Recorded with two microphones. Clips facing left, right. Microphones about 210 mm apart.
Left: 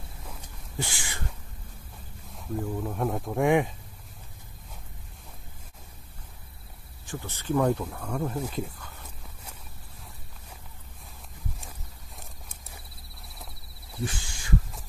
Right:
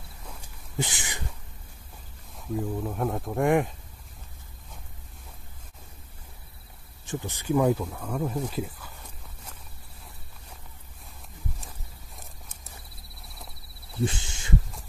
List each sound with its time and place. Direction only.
0.7 s a sound: 20° right (ahead or behind)
2.5 s speech: centre (ahead or behind)
7.1 s speech: 15° right (ahead or behind)
13.9 s speech: 25° right (ahead or behind)